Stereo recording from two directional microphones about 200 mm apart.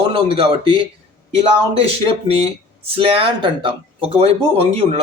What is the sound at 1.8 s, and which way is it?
Speech, 30° right (ahead or behind).